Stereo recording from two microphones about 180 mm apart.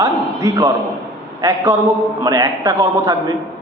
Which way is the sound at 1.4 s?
15° right (ahead or behind).